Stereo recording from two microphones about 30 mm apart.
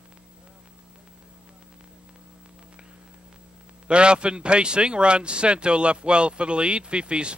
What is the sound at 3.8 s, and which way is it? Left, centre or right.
A man's voice, right.